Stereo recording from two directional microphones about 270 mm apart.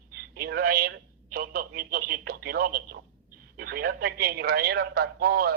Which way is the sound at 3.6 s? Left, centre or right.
Right.